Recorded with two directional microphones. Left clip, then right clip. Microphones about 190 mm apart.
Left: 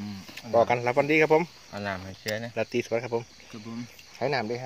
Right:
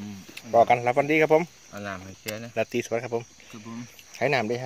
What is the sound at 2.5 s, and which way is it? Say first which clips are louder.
Speech: right 3 dB; 20° right (ahead or behind).